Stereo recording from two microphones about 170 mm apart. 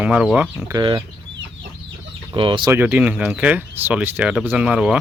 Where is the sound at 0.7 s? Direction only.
25° right (ahead or behind).